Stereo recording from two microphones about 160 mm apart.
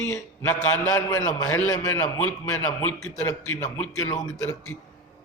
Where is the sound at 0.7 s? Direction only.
5° left (ahead or behind).